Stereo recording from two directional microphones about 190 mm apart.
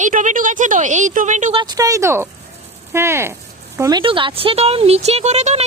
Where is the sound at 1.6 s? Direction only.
20° right (ahead or behind).